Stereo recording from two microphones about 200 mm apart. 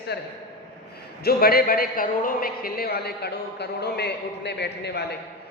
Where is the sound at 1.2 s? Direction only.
50° left (ahead or behind).